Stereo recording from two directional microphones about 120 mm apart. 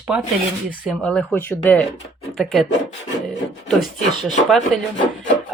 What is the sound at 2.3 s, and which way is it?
Speech, 5° left (ahead or behind).